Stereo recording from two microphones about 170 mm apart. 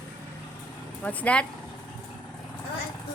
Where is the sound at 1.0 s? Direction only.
10° left (ahead or behind).